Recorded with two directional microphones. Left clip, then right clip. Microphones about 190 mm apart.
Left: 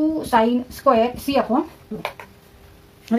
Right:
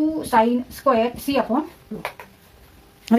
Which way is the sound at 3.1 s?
60° right (ahead or behind).